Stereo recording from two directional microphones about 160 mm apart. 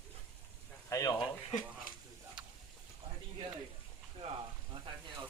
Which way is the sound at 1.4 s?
50° left (ahead or behind).